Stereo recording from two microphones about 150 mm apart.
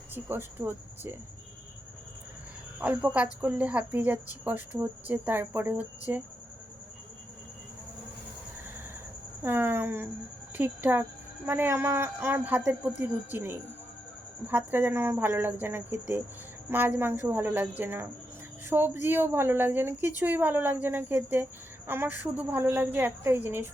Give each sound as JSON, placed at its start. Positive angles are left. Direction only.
{"t": 0.1, "sound": "speech", "side_deg": -15}
{"t": 2.8, "sound": "speech", "side_deg": -10}
{"t": 9.4, "sound": "speech", "side_deg": -15}